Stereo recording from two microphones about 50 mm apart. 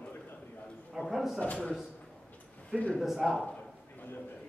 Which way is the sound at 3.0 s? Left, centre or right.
Centre.